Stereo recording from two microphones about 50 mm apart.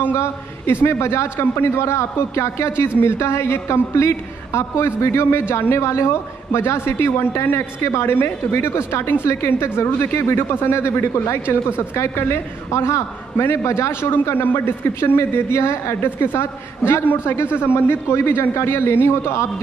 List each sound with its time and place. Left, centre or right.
0.1 s a man's voice: left
12.0 s a man's voice: left
13.4 s a woman's voice: left
14.3 s a man's voice: left